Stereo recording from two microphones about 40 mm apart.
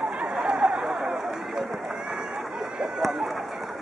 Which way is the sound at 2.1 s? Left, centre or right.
Right.